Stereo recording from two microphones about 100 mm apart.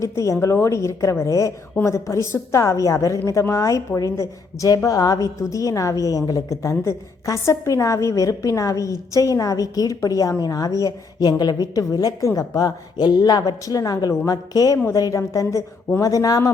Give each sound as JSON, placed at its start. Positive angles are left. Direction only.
{"t": 0.0, "sound": "a woman's voice", "side_deg": 30}